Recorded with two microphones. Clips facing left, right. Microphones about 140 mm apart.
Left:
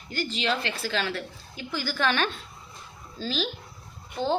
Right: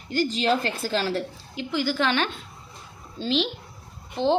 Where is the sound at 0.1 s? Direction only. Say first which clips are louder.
Right 6 dB; 40° right (ahead or behind).